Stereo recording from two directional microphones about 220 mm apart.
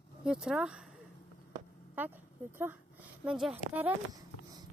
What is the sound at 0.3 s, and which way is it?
Speech, 5° right (ahead or behind).